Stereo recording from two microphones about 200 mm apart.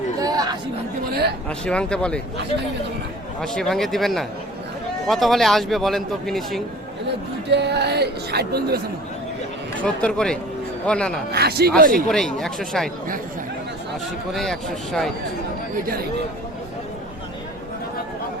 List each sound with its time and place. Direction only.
0.2 s chatter: 20° right (ahead or behind)
1.5 s a man's voice: 5° left (ahead or behind)
3.4 s a man's voice: centre (ahead or behind)
7.5 s speech: 60° right (ahead or behind)
9.8 s a man's voice: 5° left (ahead or behind)
11.3 s speech: 50° right (ahead or behind)
12.0 s a man's voice: centre (ahead or behind)
14.3 s a man's voice: centre (ahead or behind)